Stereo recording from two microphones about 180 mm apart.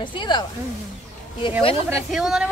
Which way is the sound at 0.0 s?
25° left (ahead or behind).